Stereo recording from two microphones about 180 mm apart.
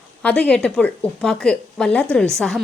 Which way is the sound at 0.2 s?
10° left (ahead or behind).